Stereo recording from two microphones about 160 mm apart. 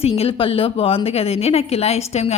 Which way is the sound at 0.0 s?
40° left (ahead or behind).